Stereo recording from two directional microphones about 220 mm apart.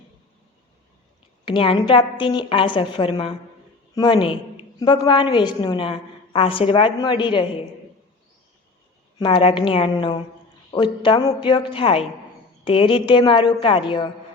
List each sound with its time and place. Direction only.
1.5 s a woman's voice: 25° left (ahead or behind)
9.1 s a woman's voice: 20° left (ahead or behind)